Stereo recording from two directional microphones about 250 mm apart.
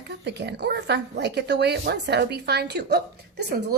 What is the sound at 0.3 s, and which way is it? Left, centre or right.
Speech, right.